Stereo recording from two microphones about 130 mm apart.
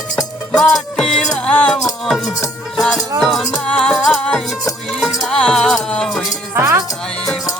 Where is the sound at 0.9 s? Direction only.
5° left (ahead or behind).